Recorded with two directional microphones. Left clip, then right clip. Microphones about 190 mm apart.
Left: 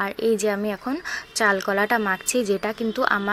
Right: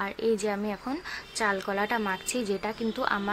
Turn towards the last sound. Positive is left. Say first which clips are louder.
# left 7 dB
turn(degrees=30)  # may be behind; listen again after turning